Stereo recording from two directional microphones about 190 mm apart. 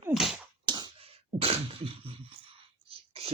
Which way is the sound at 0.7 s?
25° right (ahead or behind).